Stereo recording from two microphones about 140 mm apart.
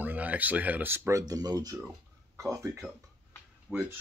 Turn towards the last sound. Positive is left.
turn(degrees=-15)  # may be behind; listen again after turning